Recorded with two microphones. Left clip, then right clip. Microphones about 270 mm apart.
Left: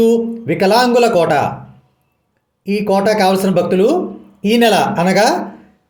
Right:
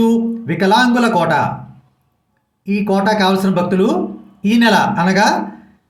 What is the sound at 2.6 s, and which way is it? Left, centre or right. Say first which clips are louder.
Speech: left 2 dB; centre.